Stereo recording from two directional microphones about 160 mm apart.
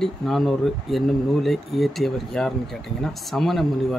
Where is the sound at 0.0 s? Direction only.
Centre (ahead or behind).